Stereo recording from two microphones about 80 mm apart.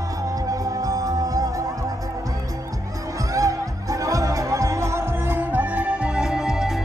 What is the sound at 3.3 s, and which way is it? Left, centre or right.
Music, right.